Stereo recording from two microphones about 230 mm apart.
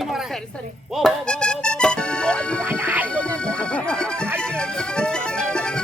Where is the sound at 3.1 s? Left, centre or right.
Centre.